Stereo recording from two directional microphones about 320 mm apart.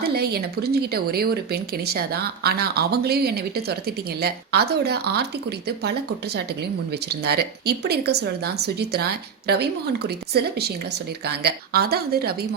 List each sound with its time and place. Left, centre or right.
0.0 s speech: right